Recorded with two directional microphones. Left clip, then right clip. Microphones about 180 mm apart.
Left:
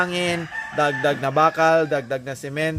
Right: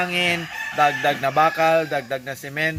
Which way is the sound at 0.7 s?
45° left (ahead or behind).